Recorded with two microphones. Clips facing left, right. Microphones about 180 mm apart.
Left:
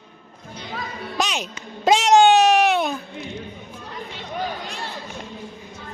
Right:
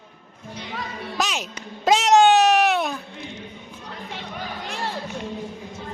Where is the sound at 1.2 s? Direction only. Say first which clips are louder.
Left 2 dB; 5° right (ahead or behind).